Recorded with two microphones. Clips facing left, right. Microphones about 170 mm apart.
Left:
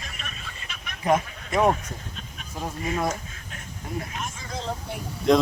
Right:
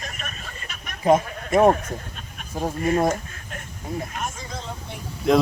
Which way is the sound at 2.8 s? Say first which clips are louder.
Right 6 dB; 50° right (ahead or behind).